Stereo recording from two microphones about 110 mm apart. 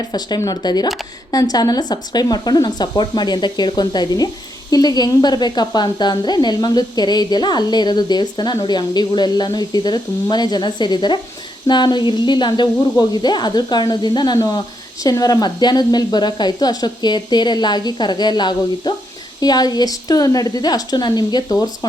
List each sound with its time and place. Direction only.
0.1 s speech: 35° left (ahead or behind)